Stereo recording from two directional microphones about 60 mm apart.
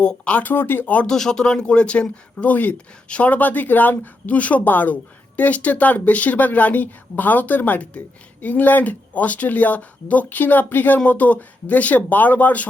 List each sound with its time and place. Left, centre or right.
0.0 s speech: centre; by 0.9 s left
1.0 s speech: centre; by 12.6 s left